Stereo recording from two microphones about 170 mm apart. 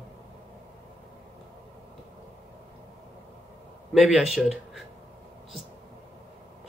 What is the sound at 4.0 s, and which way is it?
Speech, centre (ahead or behind).